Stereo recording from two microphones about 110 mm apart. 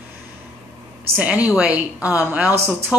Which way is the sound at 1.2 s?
10° right (ahead or behind).